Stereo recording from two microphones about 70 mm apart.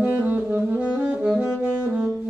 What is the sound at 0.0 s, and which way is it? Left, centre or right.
Saxophone, right.